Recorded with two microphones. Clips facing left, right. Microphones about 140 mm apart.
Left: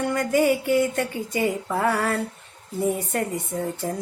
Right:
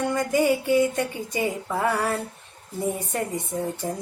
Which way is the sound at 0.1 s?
15° right (ahead or behind).